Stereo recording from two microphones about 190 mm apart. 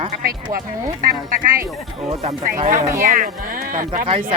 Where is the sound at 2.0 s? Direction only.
35° right (ahead or behind).